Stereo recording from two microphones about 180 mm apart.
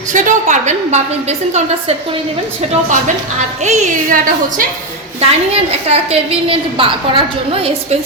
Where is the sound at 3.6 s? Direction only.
40° right (ahead or behind).